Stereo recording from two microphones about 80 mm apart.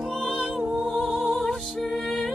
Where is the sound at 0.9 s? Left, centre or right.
Centre.